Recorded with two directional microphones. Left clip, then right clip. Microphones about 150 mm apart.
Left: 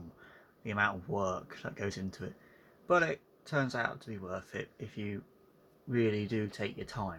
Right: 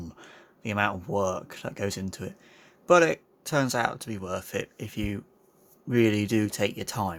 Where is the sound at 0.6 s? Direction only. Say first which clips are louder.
Right 5 dB; 45° right (ahead or behind).